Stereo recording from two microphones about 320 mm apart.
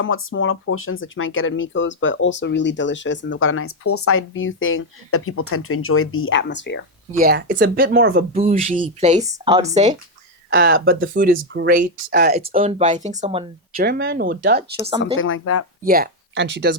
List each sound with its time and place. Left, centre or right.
0.0 s speech: left
7.2 s speech: right
10.5 s speech: right
12.4 s speech: centre
14.8 s speech: centre
15.2 s speech: left
15.8 s speech: right